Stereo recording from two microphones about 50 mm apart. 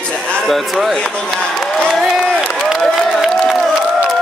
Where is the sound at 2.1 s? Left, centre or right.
Centre.